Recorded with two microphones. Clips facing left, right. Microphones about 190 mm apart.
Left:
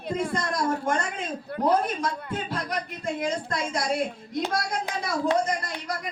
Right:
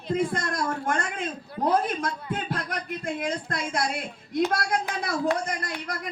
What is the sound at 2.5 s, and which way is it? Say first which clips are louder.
A woman's voice: even; 55° right (ahead or behind).